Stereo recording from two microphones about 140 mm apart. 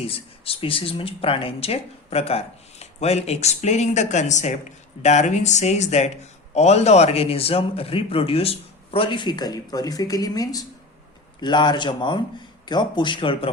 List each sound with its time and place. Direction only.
0.0 s a man's voice: 45° left (ahead or behind)